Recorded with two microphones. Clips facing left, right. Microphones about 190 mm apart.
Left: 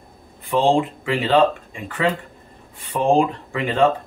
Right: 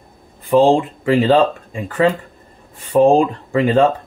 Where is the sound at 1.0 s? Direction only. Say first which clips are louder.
Right 7 dB; 40° right (ahead or behind).